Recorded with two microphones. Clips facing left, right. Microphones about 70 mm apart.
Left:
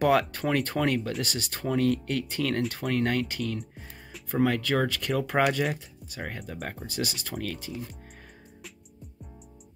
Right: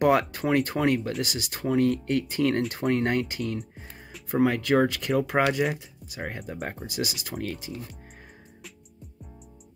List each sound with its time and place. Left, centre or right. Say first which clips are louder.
0.2 s speech: right 3 dB; centre
3.5 s music: right 2 dB; centre
4.3 s speech: right 3 dB; centre